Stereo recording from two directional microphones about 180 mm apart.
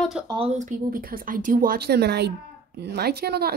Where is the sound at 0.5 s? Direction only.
45° right (ahead or behind); by 3.5 s 60° right (ahead or behind).